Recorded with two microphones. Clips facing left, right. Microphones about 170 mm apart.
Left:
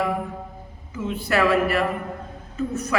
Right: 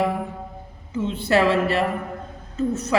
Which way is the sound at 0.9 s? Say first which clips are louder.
Right 3 dB; 25° right (ahead or behind).